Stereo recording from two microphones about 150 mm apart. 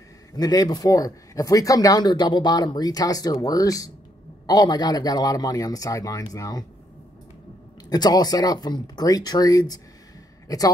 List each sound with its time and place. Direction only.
0.3 s speech: 25° left (ahead or behind)
7.9 s speech: 25° left (ahead or behind)